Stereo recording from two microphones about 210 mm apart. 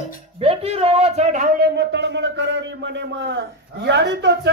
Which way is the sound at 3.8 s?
55° right (ahead or behind).